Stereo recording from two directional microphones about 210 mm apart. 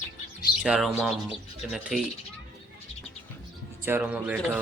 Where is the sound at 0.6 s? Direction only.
5° right (ahead or behind).